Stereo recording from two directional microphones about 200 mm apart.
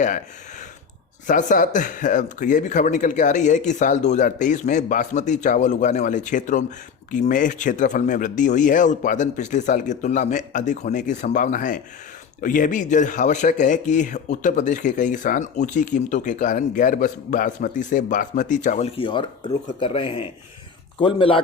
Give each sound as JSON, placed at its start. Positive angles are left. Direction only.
{"t": 1.3, "sound": "speech", "side_deg": 40}